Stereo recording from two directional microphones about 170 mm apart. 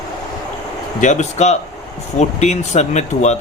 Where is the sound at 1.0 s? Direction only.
45° left (ahead or behind).